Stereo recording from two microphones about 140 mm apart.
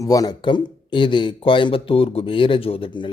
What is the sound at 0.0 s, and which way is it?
Speech, 25° left (ahead or behind).